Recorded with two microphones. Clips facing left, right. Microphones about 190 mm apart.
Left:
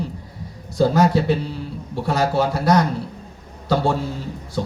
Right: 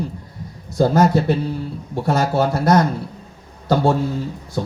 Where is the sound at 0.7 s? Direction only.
45° right (ahead or behind).